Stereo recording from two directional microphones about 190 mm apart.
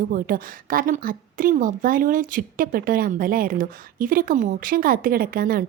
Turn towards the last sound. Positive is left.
turn(degrees=-50)  # may be behind; listen again after turning